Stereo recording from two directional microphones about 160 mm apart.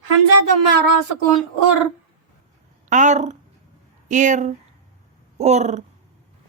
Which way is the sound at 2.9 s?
50° right (ahead or behind).